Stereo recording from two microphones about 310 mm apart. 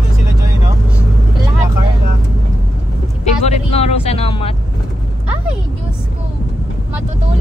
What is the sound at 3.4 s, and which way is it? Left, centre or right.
Vehicle, centre.